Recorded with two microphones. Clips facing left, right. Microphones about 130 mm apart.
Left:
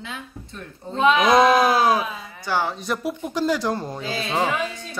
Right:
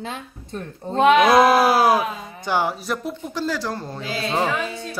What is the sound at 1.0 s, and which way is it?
Speech, 65° right (ahead or behind).